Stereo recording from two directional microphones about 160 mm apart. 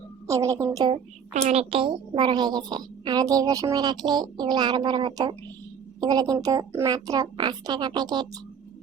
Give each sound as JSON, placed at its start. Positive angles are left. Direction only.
{"t": 0.3, "sound": "a woman's voice", "side_deg": -20}
{"t": 1.3, "sound": "a woman's voice", "side_deg": -45}